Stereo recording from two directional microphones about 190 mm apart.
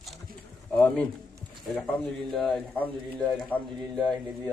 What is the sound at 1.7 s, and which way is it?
A man's voice, centre (ahead or behind).